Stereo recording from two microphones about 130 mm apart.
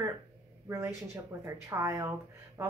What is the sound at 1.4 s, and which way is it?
A woman's voice, 25° right (ahead or behind).